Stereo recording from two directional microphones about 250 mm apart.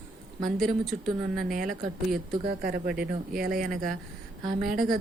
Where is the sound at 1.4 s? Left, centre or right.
Right.